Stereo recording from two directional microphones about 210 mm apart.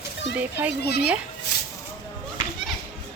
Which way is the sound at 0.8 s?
50° left (ahead or behind).